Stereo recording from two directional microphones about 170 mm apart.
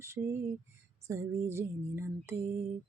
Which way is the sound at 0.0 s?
15° right (ahead or behind).